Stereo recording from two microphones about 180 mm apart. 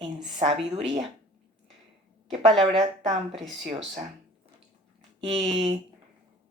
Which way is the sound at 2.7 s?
35° right (ahead or behind).